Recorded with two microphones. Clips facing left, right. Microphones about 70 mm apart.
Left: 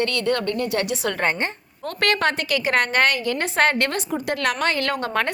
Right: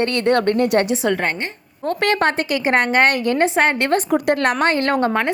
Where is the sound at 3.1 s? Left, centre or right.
Right.